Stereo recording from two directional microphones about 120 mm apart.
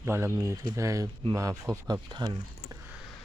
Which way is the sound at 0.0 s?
20° right (ahead or behind).